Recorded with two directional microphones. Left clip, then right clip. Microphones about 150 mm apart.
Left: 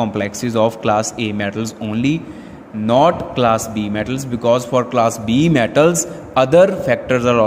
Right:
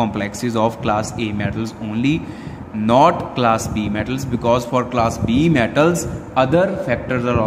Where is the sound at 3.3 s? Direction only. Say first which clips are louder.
Left 2 dB; 20° left (ahead or behind); by 7.4 s 35° left (ahead or behind).